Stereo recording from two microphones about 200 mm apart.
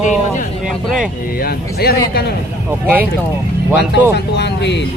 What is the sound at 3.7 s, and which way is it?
Speech, 55° left (ahead or behind).